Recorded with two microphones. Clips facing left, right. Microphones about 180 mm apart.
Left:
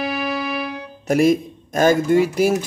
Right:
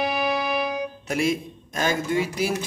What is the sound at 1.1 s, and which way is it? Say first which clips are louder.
Speech: left 9 dB; 45° left (ahead or behind).